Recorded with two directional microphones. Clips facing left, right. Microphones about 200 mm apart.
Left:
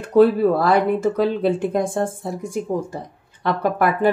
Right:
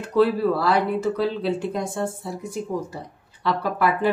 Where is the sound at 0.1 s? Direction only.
50° left (ahead or behind).